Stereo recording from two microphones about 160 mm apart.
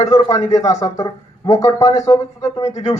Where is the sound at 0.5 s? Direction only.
45° left (ahead or behind).